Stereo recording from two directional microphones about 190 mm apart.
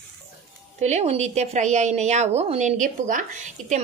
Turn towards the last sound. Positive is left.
turn(degrees=-40)  # may be behind; listen again after turning